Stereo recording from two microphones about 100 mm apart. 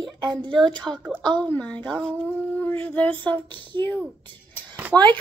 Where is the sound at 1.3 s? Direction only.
50° right (ahead or behind).